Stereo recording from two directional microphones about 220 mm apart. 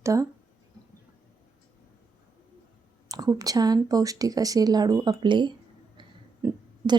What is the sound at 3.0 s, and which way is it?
A woman's voice, 15° right (ahead or behind).